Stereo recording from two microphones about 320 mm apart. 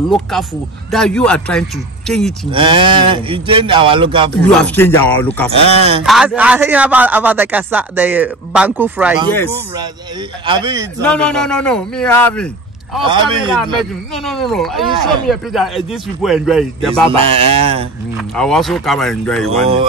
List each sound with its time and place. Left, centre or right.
0.1 s a man's voice: centre
2.5 s speech: centre
4.5 s a man's voice: centre
5.5 s speech: centre
6.0 s a man's voice: centre
10.4 s speech: centre
11.0 s a man's voice: centre
13.0 s speech: centre
14.1 s a man's voice: centre
17.1 s speech: centre
18.3 s a man's voice: centre